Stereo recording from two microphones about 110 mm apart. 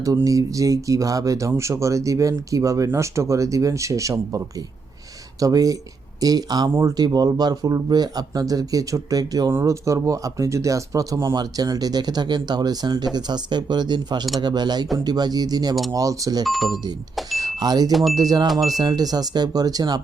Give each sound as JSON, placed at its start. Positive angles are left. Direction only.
{"t": 0.3, "sound": "speech", "side_deg": -30}
{"t": 16.4, "sound": "speech", "side_deg": 0}
{"t": 17.3, "sound": "speech", "side_deg": -35}
{"t": 18.4, "sound": "speech", "side_deg": 0}
{"t": 18.7, "sound": "speech", "side_deg": -35}